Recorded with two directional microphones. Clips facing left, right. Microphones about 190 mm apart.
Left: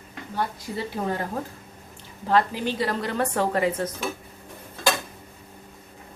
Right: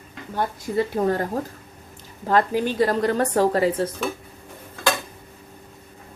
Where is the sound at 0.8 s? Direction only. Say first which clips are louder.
Right 7 dB; 45° right (ahead or behind).